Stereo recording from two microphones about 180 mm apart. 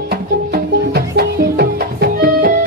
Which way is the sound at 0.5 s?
60° right (ahead or behind).